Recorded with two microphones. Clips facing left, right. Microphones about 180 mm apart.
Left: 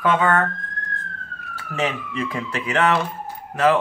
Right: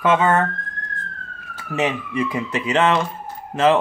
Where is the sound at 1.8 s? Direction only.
15° right (ahead or behind).